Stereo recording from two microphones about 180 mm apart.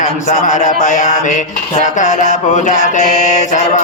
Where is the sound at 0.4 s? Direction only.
45° left (ahead or behind).